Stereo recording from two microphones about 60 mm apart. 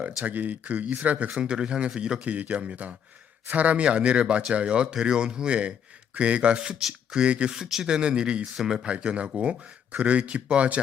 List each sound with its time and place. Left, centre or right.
0.3 s speech: right
1.3 s speech: centre